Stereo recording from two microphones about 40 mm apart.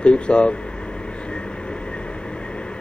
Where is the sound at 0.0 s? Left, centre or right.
Left.